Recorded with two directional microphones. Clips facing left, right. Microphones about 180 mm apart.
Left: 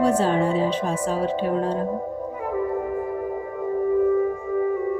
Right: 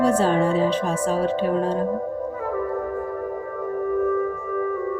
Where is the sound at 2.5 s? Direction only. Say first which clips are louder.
Left 3 dB; 15° left (ahead or behind).